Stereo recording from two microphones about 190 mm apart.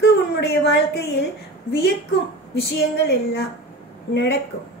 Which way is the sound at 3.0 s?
65° left (ahead or behind).